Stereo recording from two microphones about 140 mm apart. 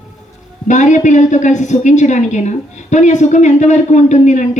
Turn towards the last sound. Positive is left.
turn(degrees=60)  # may be behind; listen again after turning